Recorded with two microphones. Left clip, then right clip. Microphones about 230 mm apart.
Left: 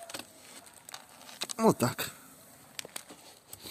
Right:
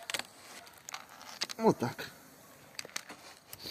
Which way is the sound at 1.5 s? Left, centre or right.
Left.